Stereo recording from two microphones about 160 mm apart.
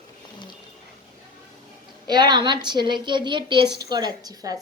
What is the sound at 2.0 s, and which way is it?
A woman's voice, 25° right (ahead or behind).